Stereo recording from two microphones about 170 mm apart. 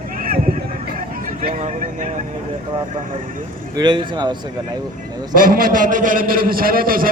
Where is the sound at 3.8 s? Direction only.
25° right (ahead or behind).